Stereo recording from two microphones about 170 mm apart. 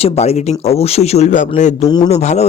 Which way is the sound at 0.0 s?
40° left (ahead or behind).